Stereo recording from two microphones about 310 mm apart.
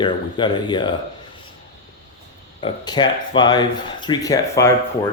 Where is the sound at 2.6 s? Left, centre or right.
Centre.